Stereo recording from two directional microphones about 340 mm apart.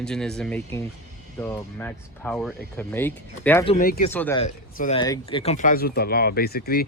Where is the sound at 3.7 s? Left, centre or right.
Left.